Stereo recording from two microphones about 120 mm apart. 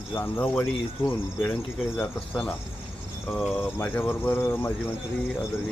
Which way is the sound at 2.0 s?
10° left (ahead or behind).